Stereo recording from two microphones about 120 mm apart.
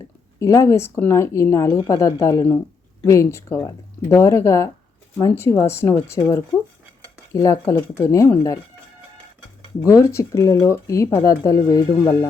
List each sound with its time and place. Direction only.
0.3 s speech: 25° left (ahead or behind)
9.8 s speech: 25° left (ahead or behind)